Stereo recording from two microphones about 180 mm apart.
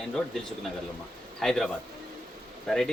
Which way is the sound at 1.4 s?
Centre (ahead or behind).